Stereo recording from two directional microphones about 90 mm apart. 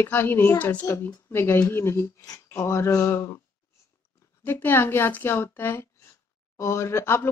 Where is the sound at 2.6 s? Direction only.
30° left (ahead or behind).